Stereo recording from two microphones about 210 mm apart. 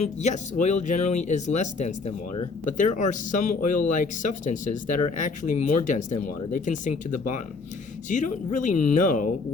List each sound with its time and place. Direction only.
0.0 s speech: 35° left (ahead or behind)